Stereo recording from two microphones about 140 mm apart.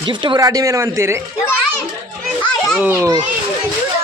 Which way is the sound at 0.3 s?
25° right (ahead or behind).